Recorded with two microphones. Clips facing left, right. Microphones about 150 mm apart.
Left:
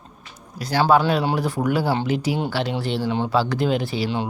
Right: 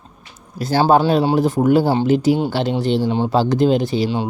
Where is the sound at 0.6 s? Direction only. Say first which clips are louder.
Right 3 dB; 25° right (ahead or behind).